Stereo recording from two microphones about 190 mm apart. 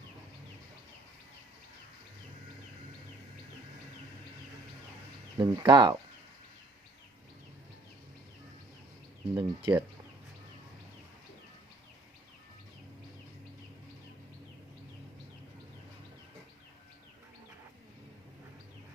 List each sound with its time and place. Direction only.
5.4 s speech: 25° right (ahead or behind)
9.3 s speech: 25° right (ahead or behind)